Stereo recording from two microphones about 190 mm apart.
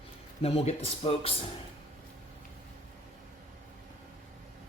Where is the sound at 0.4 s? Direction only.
35° left (ahead or behind).